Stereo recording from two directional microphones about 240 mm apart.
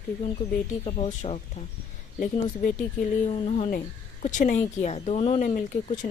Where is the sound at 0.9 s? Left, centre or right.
Left.